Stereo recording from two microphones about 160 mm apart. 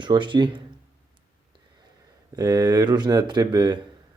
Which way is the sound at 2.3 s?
25° right (ahead or behind).